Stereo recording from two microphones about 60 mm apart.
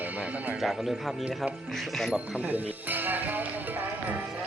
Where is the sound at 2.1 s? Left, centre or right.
Right.